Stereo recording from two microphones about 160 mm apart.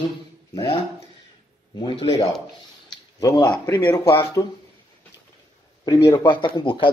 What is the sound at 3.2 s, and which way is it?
Speech, 25° left (ahead or behind).